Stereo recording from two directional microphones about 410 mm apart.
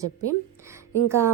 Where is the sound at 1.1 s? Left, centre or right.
Centre.